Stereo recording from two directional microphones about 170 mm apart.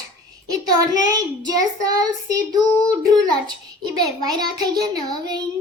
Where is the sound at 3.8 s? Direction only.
25° right (ahead or behind).